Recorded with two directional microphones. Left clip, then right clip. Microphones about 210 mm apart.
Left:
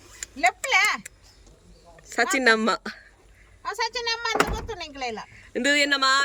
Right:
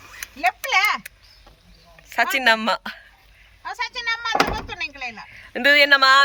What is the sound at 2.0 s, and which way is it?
Speech, 20° left (ahead or behind).